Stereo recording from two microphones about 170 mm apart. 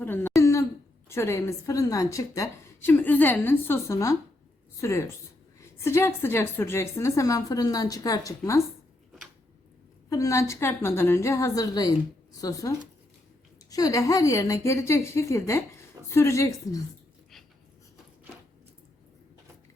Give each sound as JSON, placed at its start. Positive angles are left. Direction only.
{"t": 0.0, "sound": "throat clearing", "side_deg": 10}
{"t": 1.0, "sound": "a woman's voice", "side_deg": 15}
{"t": 10.1, "sound": "a woman's voice", "side_deg": 20}